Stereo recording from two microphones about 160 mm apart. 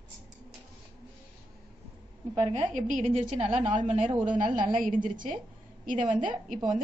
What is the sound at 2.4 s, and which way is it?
A woman's voice, 45° right (ahead or behind).